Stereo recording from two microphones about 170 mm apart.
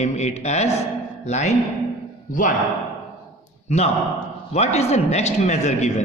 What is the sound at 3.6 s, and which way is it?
A man's voice, 40° left (ahead or behind).